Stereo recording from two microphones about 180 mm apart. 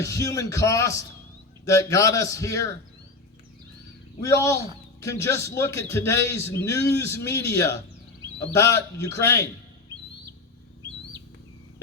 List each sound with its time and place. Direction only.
0.0 s a man's voice: 15° left (ahead or behind)
4.2 s a man's voice: 15° left (ahead or behind)